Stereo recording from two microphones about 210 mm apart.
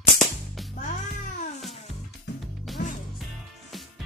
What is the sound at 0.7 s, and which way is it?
Music, 40° left (ahead or behind).